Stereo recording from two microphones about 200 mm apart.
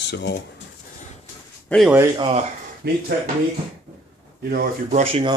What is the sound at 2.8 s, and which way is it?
Speech, 55° right (ahead or behind).